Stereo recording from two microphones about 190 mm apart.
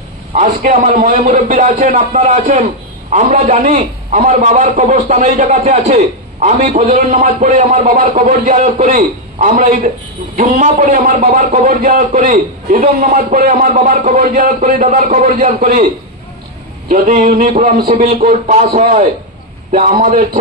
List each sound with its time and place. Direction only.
0.3 s a man's voice: 40° right (ahead or behind)
16.9 s a man's voice: 50° right (ahead or behind)